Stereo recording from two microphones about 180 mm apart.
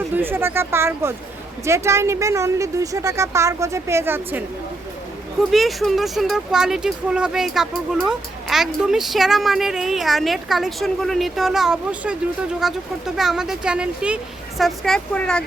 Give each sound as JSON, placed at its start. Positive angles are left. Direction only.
{"t": 0.1, "sound": "a woman's voice", "side_deg": -10}
{"t": 5.4, "sound": "speech", "side_deg": 0}